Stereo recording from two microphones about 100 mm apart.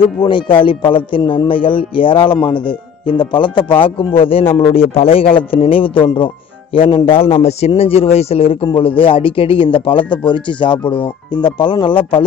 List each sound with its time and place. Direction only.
0.2 s a man's voice: 50° left (ahead or behind)
7.1 s a man's voice: 70° left (ahead or behind)
8.7 s a man's voice: 60° left (ahead or behind)